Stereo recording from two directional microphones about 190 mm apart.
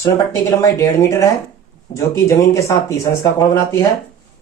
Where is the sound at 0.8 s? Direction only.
15° left (ahead or behind).